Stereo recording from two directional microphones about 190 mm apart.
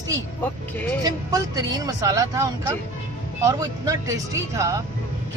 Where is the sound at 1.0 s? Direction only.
20° right (ahead or behind).